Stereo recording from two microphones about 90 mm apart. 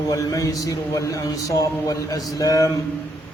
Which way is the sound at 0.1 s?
40° left (ahead or behind).